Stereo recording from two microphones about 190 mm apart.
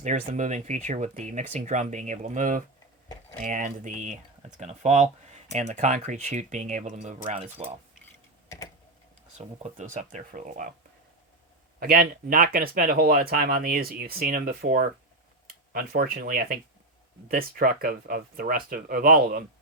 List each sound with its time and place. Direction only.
0.0 s speech: 40° right (ahead or behind)
8.4 s typing: 20° left (ahead or behind)
9.6 s speech: 40° right (ahead or behind)
11.8 s speech: 50° right (ahead or behind)